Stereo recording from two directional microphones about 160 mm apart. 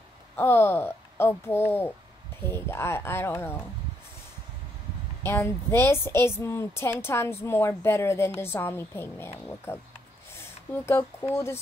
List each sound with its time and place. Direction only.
0.4 s speech: 15° left (ahead or behind)
5.2 s speech: 15° left (ahead or behind)
10.3 s a sound: 15° left (ahead or behind)